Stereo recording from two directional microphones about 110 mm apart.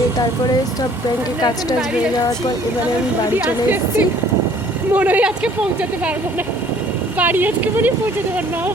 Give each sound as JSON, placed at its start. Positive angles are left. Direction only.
{"t": 4.9, "sound": "speech", "side_deg": -15}
{"t": 7.2, "sound": "speech", "side_deg": -15}